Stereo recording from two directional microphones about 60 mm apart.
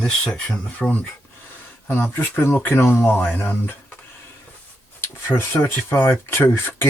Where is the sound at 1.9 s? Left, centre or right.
Left.